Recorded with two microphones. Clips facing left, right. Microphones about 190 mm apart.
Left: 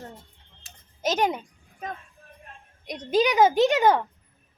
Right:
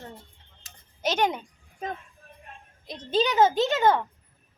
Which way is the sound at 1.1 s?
10° left (ahead or behind).